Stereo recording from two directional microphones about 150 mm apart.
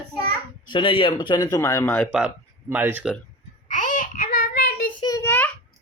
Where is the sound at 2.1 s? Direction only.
10° right (ahead or behind).